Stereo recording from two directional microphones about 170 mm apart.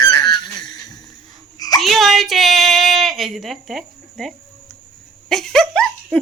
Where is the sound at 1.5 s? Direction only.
20° left (ahead or behind).